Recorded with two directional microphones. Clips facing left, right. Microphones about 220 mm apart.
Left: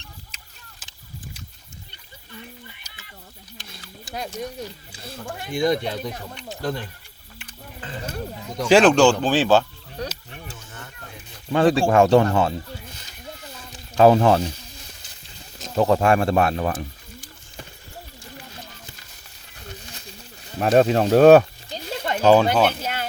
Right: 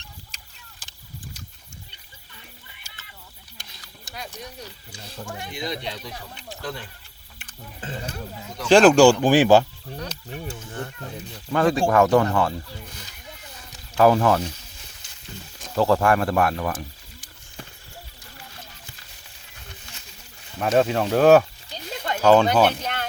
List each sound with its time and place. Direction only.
0.3 s a sound: 5° left (ahead or behind)
4.1 s speech: 50° left (ahead or behind)
8.7 s speech: 5° right (ahead or behind)
10.4 s a sound: 30° right (ahead or behind)
11.8 s speech: 25° left (ahead or behind)
13.7 s music: 25° left (ahead or behind)
15.5 s speech: 20° left (ahead or behind)
20.6 s speech: 30° left (ahead or behind)
22.0 s a sound: 25° left (ahead or behind)
22.3 s speech: 5° left (ahead or behind)